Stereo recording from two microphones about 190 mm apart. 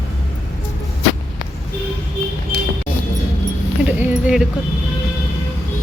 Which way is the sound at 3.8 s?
5° right (ahead or behind).